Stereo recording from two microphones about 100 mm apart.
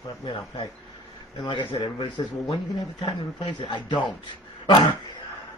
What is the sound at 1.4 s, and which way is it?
Speech, 55° left (ahead or behind).